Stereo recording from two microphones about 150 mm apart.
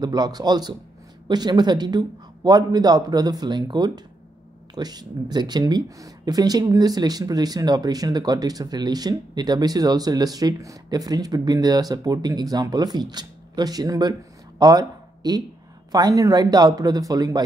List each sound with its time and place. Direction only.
0.0 s speech: 25° right (ahead or behind)